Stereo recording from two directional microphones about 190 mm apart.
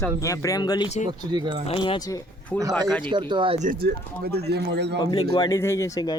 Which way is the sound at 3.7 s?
55° right (ahead or behind).